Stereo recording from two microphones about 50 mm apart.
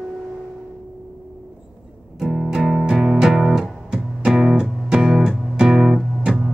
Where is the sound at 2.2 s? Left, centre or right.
Centre.